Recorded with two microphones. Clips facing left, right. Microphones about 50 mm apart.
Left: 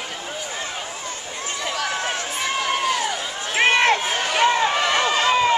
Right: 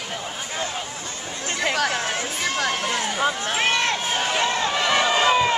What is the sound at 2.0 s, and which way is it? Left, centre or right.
Run, left.